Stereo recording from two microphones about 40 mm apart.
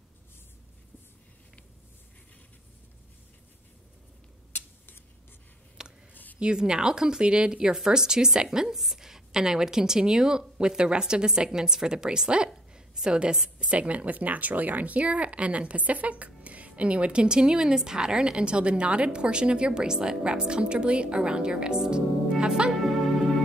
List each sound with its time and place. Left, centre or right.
4.5 s a sound: left
5.8 s a sound: centre
6.4 s a woman's voice: right
7.7 s a woman's voice: centre
13.6 s a woman's voice: right
21.9 s music: right
22.7 s music: centre